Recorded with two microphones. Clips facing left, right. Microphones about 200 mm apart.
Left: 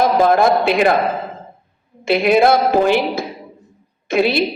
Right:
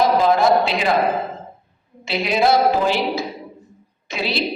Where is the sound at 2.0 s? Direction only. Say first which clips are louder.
Left 5 dB; 55° left (ahead or behind).